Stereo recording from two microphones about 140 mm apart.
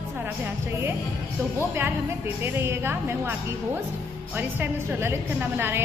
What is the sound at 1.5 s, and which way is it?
A woman's voice, 15° right (ahead or behind).